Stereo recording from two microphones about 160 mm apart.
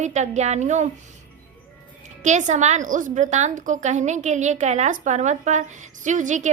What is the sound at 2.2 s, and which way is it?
A woman's voice, 50° right (ahead or behind).